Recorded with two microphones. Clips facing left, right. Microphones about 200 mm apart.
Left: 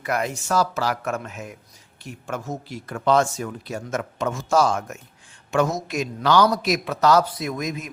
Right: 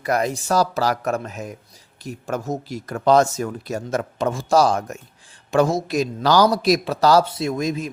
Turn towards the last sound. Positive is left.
turn(degrees=-30)  # may be behind; listen again after turning